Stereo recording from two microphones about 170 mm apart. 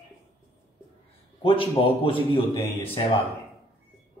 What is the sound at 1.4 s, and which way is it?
A man's voice, 30° left (ahead or behind).